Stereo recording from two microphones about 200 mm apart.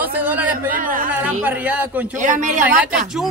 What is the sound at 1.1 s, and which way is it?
Speech, 10° right (ahead or behind).